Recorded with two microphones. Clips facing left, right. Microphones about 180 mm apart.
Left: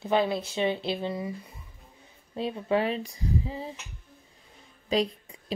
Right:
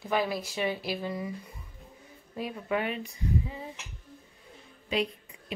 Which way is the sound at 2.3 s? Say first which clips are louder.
Left 4 dB; 30° left (ahead or behind).